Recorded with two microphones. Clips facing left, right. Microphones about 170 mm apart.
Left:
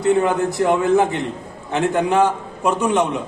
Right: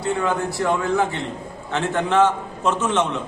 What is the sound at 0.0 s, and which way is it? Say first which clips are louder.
A man's voice: left 6 dB; 20° left (ahead or behind).